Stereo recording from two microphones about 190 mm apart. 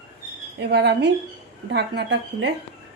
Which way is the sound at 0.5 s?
60° right (ahead or behind).